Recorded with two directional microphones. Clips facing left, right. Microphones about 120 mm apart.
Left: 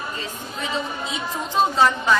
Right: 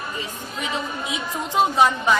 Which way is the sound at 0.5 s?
15° right (ahead or behind).